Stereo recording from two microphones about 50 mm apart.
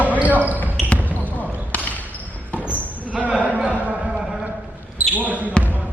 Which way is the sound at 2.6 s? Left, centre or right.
Right.